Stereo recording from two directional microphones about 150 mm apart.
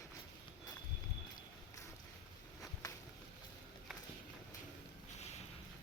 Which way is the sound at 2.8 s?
25° left (ahead or behind).